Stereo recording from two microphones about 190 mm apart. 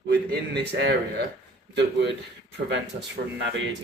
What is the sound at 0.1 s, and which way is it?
Speech, 60° right (ahead or behind).